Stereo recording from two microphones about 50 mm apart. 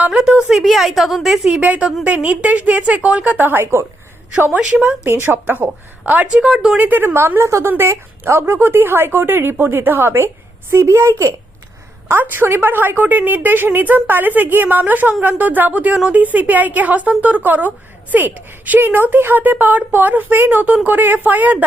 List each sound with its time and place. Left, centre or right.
0.0 s a woman's voice: right
0.6 s a woman's voice: centre
1.6 s a woman's voice: right
4.5 s a woman's voice: right
5.2 s speech: right
6.4 s speech: centre
6.7 s a woman's voice: right
7.3 s a woman's voice: right
10.7 s a woman's voice: right
12.2 s a woman's voice: right